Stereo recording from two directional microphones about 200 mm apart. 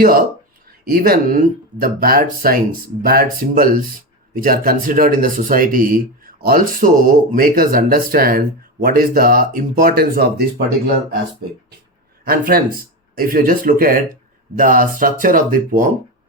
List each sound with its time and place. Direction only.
0.0 s speech: 45° right (ahead or behind)
12.2 s speech: 45° right (ahead or behind)